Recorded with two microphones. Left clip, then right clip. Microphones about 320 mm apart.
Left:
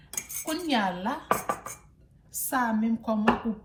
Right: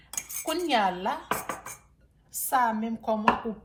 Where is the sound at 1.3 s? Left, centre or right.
Centre.